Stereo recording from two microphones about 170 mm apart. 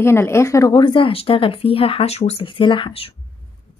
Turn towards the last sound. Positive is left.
turn(degrees=30)  # may be behind; listen again after turning